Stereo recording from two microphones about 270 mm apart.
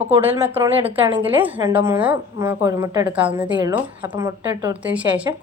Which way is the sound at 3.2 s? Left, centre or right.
Centre.